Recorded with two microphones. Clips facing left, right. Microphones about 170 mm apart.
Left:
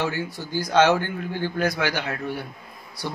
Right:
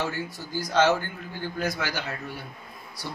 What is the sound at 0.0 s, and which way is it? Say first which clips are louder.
A man's voice: left 4 dB; 65° left (ahead or behind).